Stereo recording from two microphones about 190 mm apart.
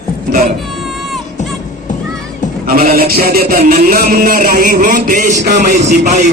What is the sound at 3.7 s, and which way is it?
A man's voice, 50° right (ahead or behind).